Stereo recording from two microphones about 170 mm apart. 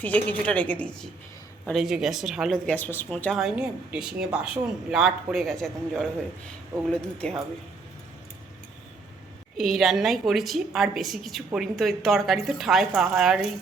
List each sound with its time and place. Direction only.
0.0 s a woman's voice: 10° left (ahead or behind)
9.6 s speech: centre (ahead or behind)